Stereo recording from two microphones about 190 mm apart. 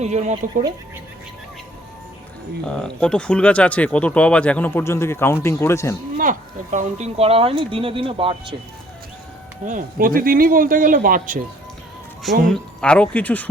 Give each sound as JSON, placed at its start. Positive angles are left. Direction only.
{"t": 0.0, "sound": "speech", "side_deg": -40}
{"t": 2.8, "sound": "speech", "side_deg": 5}
{"t": 6.1, "sound": "speech", "side_deg": -40}
{"t": 9.6, "sound": "speech", "side_deg": -45}
{"t": 12.5, "sound": "speech", "side_deg": 5}